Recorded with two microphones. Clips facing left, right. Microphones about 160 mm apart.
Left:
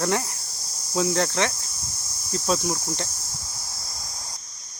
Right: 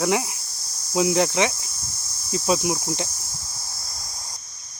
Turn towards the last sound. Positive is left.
turn(degrees=-10)  # may be behind; listen again after turning